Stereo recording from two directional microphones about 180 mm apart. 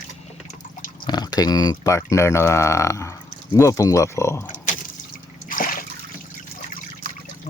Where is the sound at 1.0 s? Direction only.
20° left (ahead or behind).